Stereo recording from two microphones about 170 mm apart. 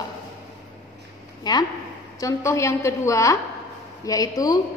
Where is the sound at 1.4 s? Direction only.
25° left (ahead or behind).